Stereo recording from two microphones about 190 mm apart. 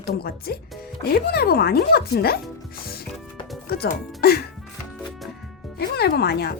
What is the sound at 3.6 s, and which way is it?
Music, 55° left (ahead or behind).